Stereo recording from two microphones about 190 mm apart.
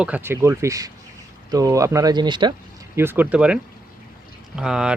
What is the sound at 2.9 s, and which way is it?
Speech, 10° right (ahead or behind).